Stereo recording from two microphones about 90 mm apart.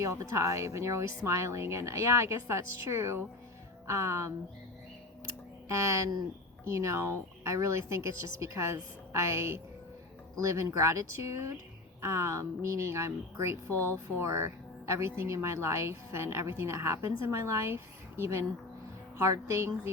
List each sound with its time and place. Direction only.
0.0 s speech: 35° right (ahead or behind)
5.6 s speech: 35° right (ahead or behind)
10.7 s speech: 35° right (ahead or behind)
14.2 s speech: 30° right (ahead or behind)